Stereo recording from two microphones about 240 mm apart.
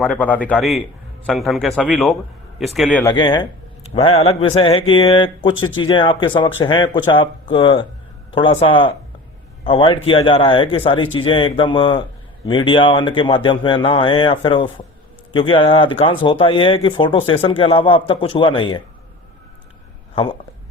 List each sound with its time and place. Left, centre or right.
0.0 s speech: centre
3.0 s speech: centre